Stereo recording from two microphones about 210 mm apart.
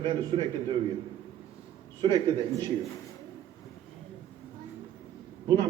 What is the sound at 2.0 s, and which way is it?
Speech, 20° right (ahead or behind).